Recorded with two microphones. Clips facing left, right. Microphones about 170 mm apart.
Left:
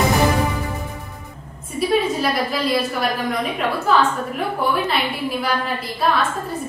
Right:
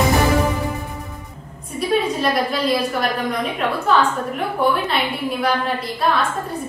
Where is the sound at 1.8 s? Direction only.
Centre (ahead or behind).